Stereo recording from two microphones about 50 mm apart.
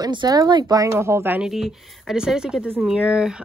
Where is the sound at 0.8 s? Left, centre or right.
Right.